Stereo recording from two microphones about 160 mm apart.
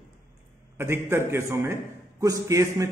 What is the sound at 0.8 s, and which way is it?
A man's voice, 15° right (ahead or behind).